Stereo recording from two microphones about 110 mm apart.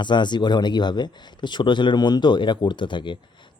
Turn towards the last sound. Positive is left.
turn(degrees=45)  # may be behind; listen again after turning